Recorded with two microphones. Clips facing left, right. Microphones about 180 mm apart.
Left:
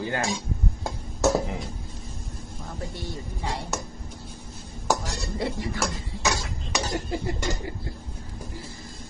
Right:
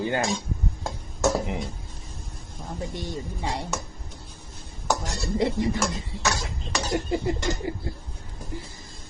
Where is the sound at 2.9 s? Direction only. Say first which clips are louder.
Right 3 dB; 20° right (ahead or behind).